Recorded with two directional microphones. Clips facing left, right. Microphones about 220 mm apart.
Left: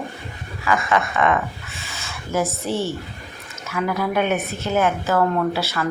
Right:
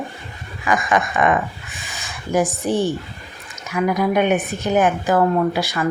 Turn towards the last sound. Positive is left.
turn(degrees=-15)  # may be behind; listen again after turning